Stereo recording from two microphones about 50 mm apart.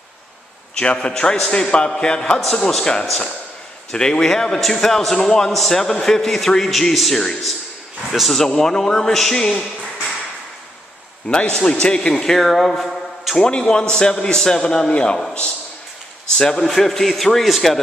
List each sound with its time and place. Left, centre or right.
0.7 s a man's voice: centre
11.2 s a man's voice: centre
12.4 s a sound: centre
13.4 s a man's voice: centre
16.3 s a man's voice: centre